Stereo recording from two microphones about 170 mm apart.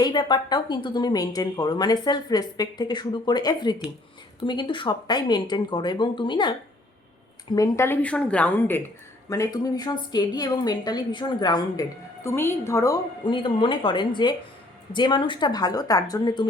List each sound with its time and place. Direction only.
0.0 s a woman's voice: 25° left (ahead or behind)